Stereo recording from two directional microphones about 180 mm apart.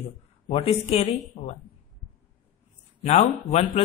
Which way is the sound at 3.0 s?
40° left (ahead or behind).